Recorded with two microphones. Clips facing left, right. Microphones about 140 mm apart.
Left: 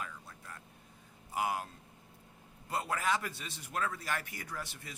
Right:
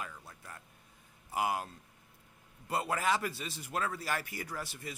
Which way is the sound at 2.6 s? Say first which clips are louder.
Right 2 dB; 5° right (ahead or behind).